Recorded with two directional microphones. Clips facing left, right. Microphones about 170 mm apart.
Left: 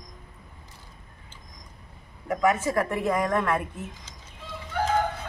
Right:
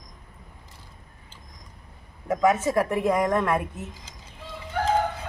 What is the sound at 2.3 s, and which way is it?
Speech, 20° right (ahead or behind).